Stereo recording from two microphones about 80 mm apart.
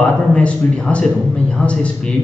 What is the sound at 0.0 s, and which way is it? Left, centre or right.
A man's voice, centre.